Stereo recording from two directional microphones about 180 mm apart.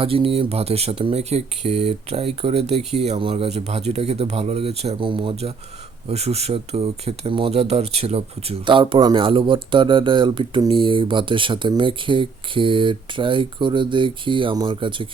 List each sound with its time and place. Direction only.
0.0 s speech: 30° right (ahead or behind)